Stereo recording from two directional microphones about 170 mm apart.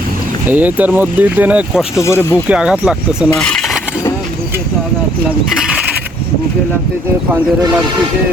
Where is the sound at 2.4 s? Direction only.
5° right (ahead or behind).